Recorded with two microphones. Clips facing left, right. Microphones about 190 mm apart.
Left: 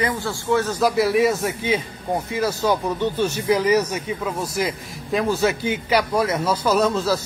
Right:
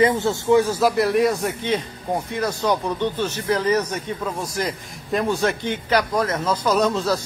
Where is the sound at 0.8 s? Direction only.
Centre (ahead or behind).